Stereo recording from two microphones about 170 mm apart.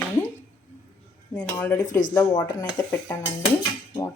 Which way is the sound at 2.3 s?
25° left (ahead or behind).